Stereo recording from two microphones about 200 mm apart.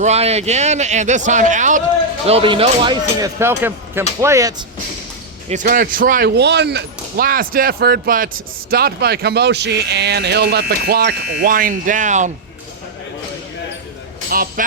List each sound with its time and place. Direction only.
0.0 s a man's voice: 30° right (ahead or behind); by 4.5 s 15° right (ahead or behind)
5.5 s speech: 40° right (ahead or behind)
14.3 s speech: 45° right (ahead or behind)